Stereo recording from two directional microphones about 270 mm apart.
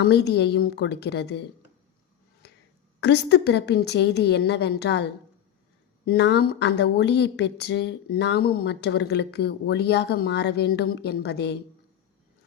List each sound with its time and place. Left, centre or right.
0.0 s speech: left
3.0 s speech: left